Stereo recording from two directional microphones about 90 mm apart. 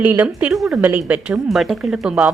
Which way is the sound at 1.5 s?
Centre (ahead or behind).